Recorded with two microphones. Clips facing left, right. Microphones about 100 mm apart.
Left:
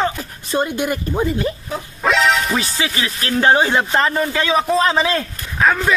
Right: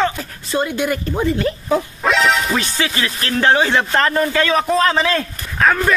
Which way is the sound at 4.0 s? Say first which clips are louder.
Right 2 dB; 5° left (ahead or behind).